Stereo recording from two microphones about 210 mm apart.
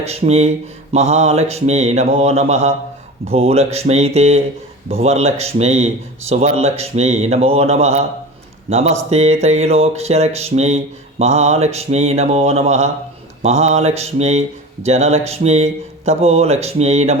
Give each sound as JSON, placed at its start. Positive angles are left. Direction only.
{"t": 0.0, "sound": "speech", "side_deg": -30}